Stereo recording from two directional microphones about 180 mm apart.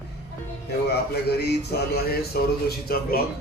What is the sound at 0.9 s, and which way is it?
Speech, 60° left (ahead or behind).